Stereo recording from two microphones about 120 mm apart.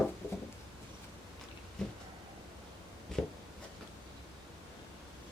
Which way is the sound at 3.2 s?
5° left (ahead or behind).